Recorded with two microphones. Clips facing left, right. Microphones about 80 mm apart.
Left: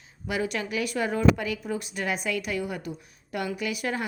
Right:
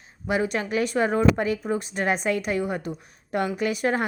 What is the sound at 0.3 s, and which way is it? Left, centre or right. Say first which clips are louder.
A woman's voice: right 4 dB; right.